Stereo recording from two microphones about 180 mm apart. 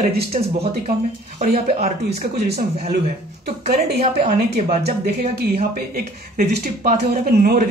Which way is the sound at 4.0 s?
35° right (ahead or behind).